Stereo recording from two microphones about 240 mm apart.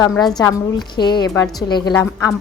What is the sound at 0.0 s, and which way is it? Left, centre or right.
A woman's voice, centre.